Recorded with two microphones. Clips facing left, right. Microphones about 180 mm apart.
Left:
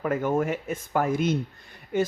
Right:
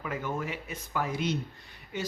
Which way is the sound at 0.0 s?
50° left (ahead or behind).